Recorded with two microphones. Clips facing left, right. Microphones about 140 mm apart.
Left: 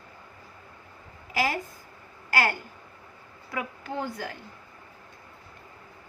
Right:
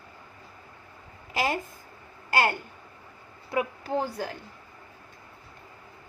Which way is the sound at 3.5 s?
30° right (ahead or behind).